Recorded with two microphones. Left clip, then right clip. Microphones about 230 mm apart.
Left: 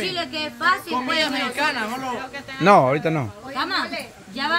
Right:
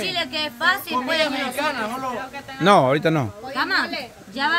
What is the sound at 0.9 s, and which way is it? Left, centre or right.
A man's voice, centre.